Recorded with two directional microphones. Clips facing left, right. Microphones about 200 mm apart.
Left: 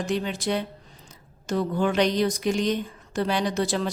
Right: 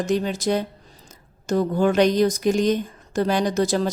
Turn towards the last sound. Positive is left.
turn(degrees=-40)  # may be behind; listen again after turning